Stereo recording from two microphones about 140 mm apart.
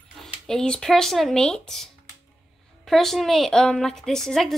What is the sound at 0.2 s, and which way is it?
A woman's voice, 5° left (ahead or behind).